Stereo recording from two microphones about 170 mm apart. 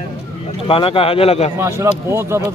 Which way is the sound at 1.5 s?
15° right (ahead or behind).